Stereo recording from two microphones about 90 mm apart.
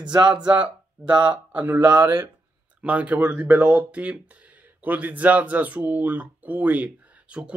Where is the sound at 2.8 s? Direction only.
15° right (ahead or behind).